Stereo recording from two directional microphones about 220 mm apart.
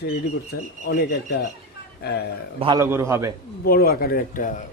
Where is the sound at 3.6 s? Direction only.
45° left (ahead or behind).